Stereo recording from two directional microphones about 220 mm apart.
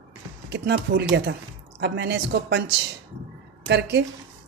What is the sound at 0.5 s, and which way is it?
A woman's voice, 50° right (ahead or behind).